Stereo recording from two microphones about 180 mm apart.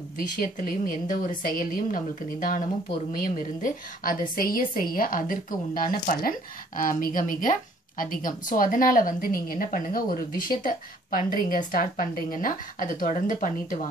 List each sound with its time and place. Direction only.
0.4 s a woman's voice: 55° left (ahead or behind)